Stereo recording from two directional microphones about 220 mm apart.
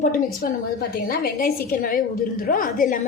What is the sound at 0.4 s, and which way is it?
A woman's voice, 40° left (ahead or behind).